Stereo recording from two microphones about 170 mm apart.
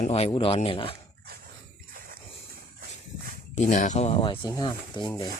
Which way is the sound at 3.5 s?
45° left (ahead or behind).